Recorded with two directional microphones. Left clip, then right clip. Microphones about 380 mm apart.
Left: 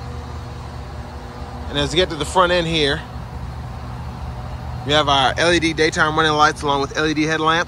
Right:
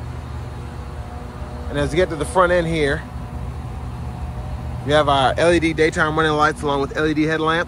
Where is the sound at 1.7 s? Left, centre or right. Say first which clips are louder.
Left 1 dB; centre.